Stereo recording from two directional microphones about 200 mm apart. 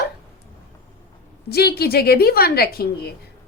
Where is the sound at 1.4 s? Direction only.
50° left (ahead or behind).